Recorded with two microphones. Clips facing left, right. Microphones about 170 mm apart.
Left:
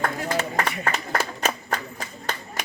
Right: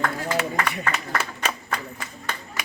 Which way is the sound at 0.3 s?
35° left (ahead or behind).